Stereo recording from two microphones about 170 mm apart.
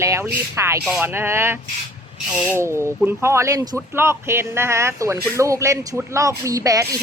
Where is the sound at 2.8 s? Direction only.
15° right (ahead or behind).